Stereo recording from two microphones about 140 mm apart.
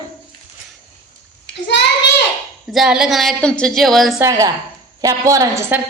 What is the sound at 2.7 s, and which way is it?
A woman's voice, 5° right (ahead or behind).